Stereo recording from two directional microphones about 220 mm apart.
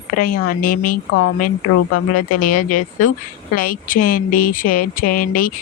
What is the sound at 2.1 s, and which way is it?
Speech, 40° left (ahead or behind).